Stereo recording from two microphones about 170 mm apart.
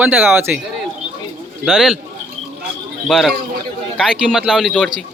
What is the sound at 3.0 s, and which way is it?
Speech, centre (ahead or behind).